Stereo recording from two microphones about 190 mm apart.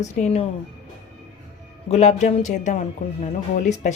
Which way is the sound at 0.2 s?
35° left (ahead or behind).